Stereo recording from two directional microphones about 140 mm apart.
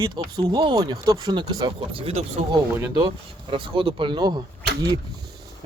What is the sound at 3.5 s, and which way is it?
Speech, 40° right (ahead or behind).